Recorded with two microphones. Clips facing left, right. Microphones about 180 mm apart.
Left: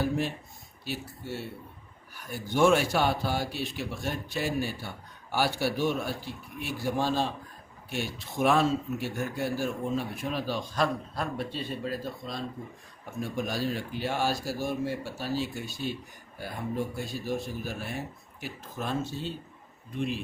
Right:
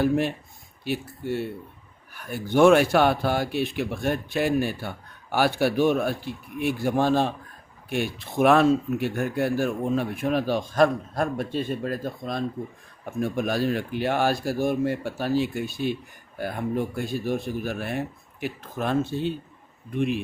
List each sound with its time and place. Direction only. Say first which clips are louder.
0.9 s speech: right 8 dB; 55° right (ahead or behind)